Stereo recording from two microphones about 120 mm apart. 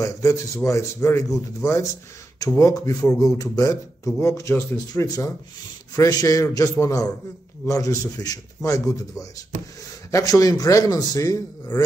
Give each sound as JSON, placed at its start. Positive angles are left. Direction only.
{"t": 0.0, "sound": "speech", "side_deg": 25}